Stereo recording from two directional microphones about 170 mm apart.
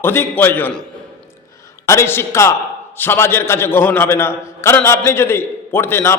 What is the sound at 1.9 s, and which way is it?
A man's voice, 15° left (ahead or behind).